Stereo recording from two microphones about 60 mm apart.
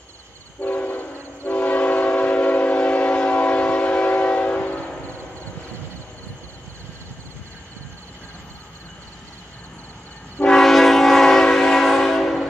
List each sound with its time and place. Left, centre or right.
0.6 s train: left
10.4 s train: centre